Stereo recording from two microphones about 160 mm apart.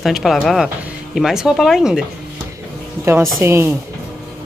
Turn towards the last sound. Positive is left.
turn(degrees=-15)  # may be behind; listen again after turning